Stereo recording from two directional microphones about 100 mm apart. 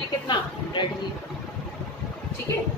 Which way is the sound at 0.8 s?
50° left (ahead or behind).